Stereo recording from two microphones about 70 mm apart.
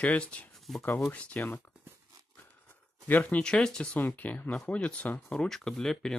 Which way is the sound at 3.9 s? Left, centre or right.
Left.